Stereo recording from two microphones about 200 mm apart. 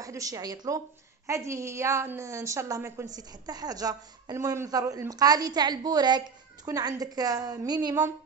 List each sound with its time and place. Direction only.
0.0 s a woman's voice: 15° right (ahead or behind)